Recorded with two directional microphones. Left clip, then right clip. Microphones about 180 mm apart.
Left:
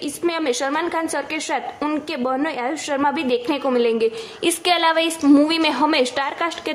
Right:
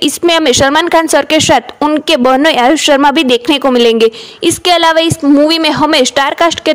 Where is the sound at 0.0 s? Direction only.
50° right (ahead or behind).